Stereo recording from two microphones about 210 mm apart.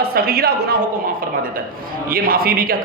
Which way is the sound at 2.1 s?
45° right (ahead or behind).